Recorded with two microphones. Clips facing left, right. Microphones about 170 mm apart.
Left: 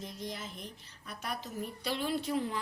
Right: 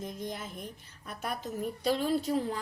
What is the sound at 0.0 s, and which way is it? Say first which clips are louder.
A woman's voice: right 3 dB; 50° right (ahead or behind).